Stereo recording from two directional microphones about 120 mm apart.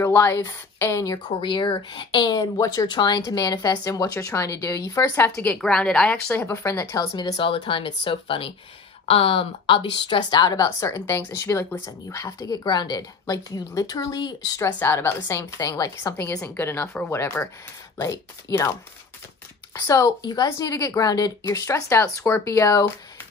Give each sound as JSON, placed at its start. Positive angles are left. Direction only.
{"t": 0.0, "sound": "speech", "side_deg": 20}
{"t": 1.8, "sound": "speech", "side_deg": 40}
{"t": 6.4, "sound": "speech", "side_deg": 25}
{"t": 7.3, "sound": "speech", "side_deg": 45}
{"t": 14.8, "sound": "speech", "side_deg": 20}